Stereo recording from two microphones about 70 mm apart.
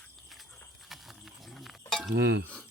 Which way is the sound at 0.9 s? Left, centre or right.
Centre.